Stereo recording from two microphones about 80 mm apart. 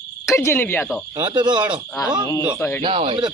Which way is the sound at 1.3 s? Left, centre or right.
Right.